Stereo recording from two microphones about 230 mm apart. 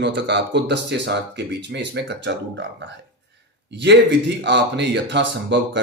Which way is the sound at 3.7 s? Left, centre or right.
Right.